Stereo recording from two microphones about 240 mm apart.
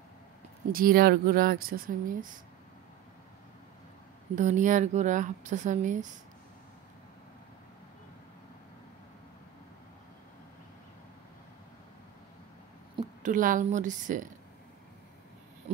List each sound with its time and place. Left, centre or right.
0.7 s speech: right
4.4 s speech: right
13.2 s speech: right